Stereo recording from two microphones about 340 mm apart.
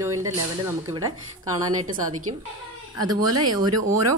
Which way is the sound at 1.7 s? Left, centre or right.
Right.